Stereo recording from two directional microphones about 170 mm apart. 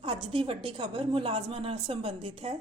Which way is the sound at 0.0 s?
35° right (ahead or behind).